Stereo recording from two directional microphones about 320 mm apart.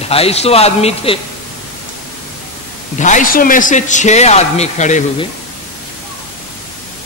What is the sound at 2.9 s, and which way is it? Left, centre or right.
A man's voice, left.